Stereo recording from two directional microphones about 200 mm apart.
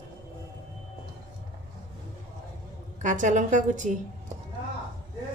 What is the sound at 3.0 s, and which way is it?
Speech, 40° right (ahead or behind).